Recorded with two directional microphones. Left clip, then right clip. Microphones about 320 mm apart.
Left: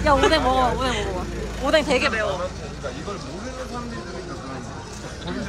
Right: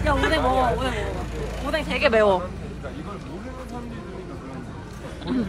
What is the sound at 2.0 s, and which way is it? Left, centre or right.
Speech, centre.